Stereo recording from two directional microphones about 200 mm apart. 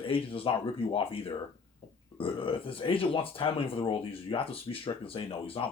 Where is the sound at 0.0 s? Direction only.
25° left (ahead or behind).